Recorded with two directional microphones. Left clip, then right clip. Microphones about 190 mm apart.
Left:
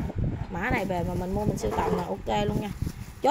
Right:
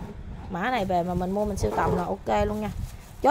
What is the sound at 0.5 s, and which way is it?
Speech, 15° right (ahead or behind).